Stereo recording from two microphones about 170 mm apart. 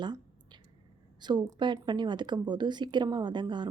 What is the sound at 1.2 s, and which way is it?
A woman's voice, 25° right (ahead or behind).